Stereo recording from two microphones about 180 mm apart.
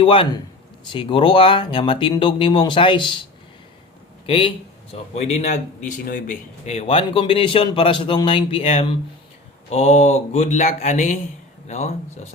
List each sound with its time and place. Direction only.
0.0 s speech: 25° left (ahead or behind)
4.3 s speech: 30° left (ahead or behind)